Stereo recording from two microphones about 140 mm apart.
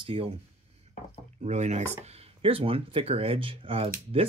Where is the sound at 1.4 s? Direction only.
55° right (ahead or behind).